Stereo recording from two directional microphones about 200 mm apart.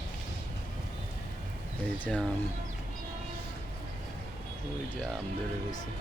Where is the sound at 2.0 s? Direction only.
5° left (ahead or behind).